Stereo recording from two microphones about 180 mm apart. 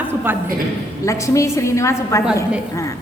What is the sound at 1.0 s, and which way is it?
A woman's voice, 15° left (ahead or behind).